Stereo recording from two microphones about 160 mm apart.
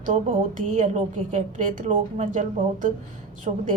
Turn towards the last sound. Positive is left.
turn(degrees=-50)  # may be behind; listen again after turning